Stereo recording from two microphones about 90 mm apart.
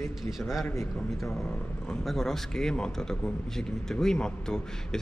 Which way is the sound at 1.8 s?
5° left (ahead or behind).